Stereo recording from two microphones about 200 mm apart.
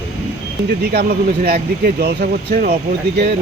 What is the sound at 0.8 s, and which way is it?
A man's voice, 50° right (ahead or behind).